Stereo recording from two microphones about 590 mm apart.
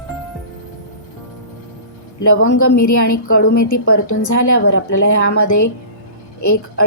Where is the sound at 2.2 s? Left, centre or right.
Left.